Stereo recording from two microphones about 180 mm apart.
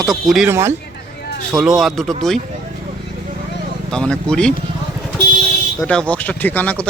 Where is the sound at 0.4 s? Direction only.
15° right (ahead or behind).